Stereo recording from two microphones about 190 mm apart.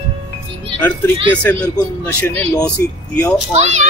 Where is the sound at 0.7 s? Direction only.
10° left (ahead or behind).